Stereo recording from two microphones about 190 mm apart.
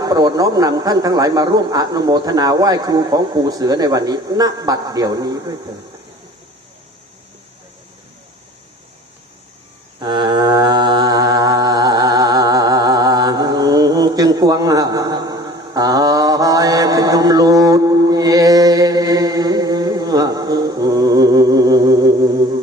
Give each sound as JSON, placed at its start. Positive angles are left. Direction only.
{"t": 0.0, "sound": "a man's voice", "side_deg": -20}
{"t": 10.0, "sound": "mantra", "side_deg": -25}